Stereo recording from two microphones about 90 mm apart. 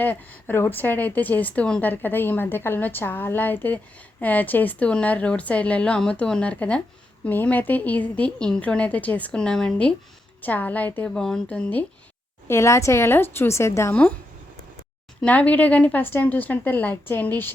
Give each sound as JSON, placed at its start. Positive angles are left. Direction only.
{"t": 0.0, "sound": "a woman's voice", "side_deg": 20}
{"t": 11.1, "sound": "a woman's voice", "side_deg": 10}
{"t": 12.5, "sound": "a woman's voice", "side_deg": 30}
{"t": 15.2, "sound": "a woman's voice", "side_deg": 15}